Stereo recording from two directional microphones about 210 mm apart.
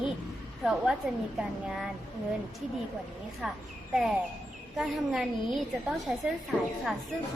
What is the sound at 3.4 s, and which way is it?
A woman's voice, centre (ahead or behind).